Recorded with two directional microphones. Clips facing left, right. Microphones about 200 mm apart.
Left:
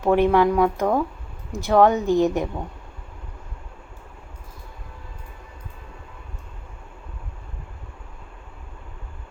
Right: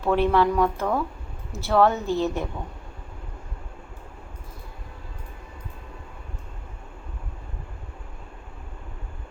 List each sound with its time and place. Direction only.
0.1 s a woman's voice: 15° left (ahead or behind)